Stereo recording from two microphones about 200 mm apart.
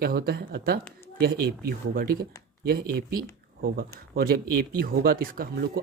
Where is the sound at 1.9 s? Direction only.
45° right (ahead or behind).